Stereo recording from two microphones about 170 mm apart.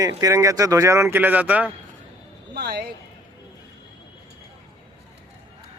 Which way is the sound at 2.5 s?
75° right (ahead or behind).